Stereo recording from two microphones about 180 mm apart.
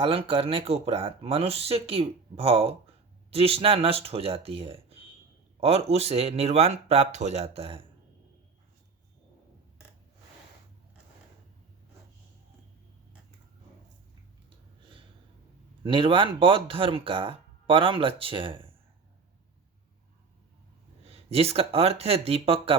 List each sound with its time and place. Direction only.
0.0 s speech: 30° right (ahead or behind)
15.8 s speech: 30° right (ahead or behind)
21.0 s speech: 35° right (ahead or behind)